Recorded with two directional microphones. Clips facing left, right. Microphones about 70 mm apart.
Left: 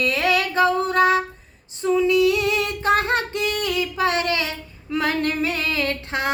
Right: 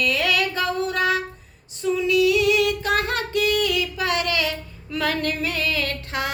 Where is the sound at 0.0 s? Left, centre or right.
Left.